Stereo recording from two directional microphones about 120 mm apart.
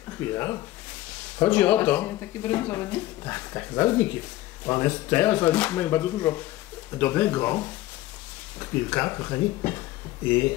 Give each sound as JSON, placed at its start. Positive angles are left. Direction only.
{"t": 0.2, "sound": "speech", "side_deg": 20}